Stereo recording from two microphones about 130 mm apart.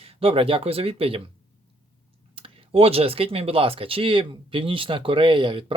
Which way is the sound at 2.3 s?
45° right (ahead or behind).